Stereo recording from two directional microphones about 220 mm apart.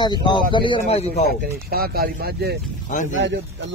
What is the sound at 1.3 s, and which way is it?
Speech, 40° right (ahead or behind).